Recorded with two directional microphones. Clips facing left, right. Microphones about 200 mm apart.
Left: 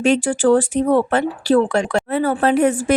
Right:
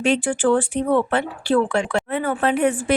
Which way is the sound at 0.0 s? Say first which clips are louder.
Left 3 dB; 40° left (ahead or behind).